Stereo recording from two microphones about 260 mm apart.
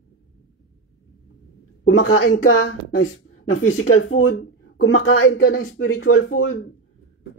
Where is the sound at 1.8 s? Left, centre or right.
Left.